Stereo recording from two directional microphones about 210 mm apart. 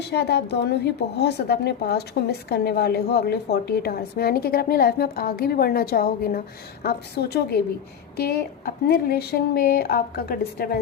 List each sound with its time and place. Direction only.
0.0 s a woman's voice: 50° left (ahead or behind)